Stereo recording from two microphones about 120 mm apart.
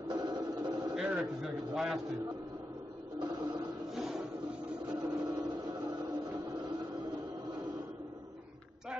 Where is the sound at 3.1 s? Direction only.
35° right (ahead or behind).